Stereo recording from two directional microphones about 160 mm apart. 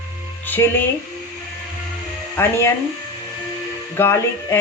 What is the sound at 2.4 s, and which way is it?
Speech, 15° left (ahead or behind).